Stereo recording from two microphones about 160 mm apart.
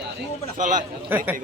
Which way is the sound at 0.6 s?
55° right (ahead or behind).